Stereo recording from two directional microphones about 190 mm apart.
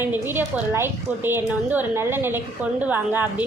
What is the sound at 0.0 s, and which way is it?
A child's voice, 10° right (ahead or behind).